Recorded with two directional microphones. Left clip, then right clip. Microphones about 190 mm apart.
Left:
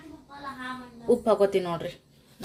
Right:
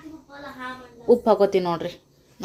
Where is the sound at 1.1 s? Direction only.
15° right (ahead or behind).